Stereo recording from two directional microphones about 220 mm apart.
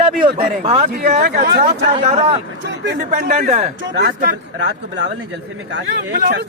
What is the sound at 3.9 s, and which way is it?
Speech, 45° right (ahead or behind).